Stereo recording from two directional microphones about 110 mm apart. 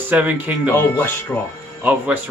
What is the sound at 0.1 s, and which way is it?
Speech, 15° right (ahead or behind).